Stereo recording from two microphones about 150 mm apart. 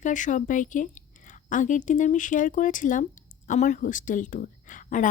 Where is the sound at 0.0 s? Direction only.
55° left (ahead or behind).